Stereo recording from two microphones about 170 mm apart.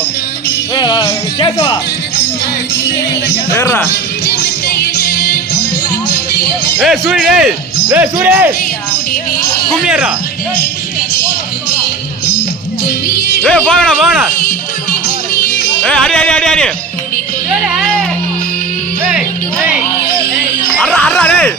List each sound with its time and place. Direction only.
3.5 s speech: 15° left (ahead or behind)
6.7 s speech: centre (ahead or behind)
9.8 s speech: 5° right (ahead or behind)
13.4 s speech: 5° left (ahead or behind)
15.8 s speech: 5° left (ahead or behind)
20.7 s music: 5° left (ahead or behind)